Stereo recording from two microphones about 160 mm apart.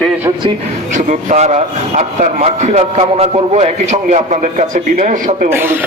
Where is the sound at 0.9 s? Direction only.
50° right (ahead or behind).